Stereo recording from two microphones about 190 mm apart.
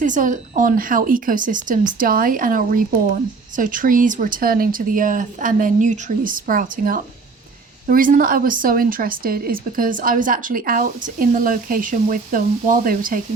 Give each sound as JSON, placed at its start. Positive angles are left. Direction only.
{"t": 0.0, "sound": "a woman's voice", "side_deg": -45}